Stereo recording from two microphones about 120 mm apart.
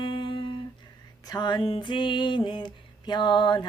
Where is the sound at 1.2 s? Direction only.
35° left (ahead or behind).